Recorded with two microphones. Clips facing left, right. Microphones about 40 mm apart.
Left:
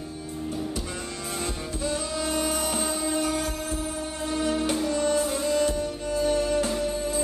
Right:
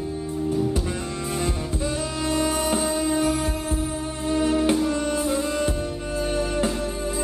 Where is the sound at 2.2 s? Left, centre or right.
Right.